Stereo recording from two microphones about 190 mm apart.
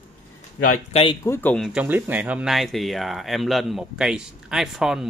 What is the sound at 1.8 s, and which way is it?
Speech, 10° right (ahead or behind).